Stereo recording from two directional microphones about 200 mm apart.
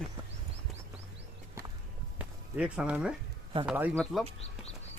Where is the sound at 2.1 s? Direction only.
5° right (ahead or behind).